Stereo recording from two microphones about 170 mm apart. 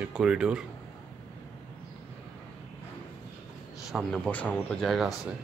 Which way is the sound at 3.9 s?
Centre (ahead or behind).